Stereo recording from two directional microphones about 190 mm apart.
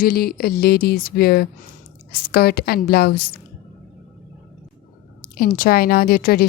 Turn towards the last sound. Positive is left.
turn(degrees=50)  # may be behind; listen again after turning